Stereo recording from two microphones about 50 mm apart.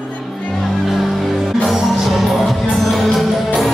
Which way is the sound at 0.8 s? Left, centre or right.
Centre.